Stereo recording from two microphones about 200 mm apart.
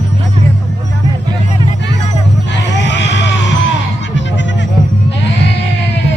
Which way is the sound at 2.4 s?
60° left (ahead or behind).